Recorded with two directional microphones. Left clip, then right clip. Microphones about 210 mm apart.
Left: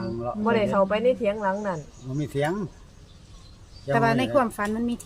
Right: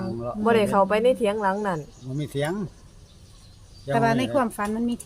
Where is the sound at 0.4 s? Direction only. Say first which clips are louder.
Right 3 dB; 50° right (ahead or behind).